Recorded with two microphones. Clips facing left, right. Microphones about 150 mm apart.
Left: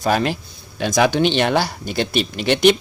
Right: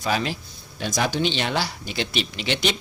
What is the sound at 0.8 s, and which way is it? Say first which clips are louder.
Speech: left 7 dB; 70° left (ahead or behind).